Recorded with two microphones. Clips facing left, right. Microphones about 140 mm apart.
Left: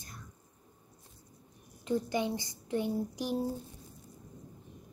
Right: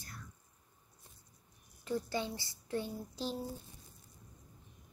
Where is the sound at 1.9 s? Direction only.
20° left (ahead or behind).